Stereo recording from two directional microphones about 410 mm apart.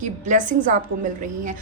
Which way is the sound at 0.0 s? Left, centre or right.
Centre.